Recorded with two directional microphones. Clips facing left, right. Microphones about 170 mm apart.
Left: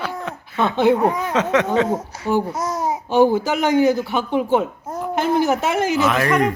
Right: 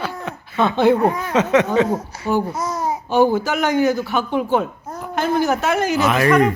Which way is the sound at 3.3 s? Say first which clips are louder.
Left 1 dB; 30° left (ahead or behind).